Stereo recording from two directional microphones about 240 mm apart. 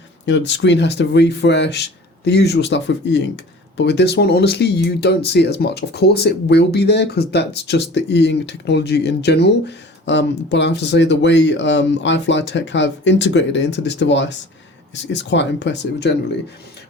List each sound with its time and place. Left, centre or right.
0.3 s speech: left